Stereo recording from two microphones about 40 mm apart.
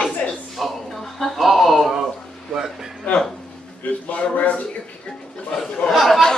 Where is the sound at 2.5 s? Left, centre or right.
Centre.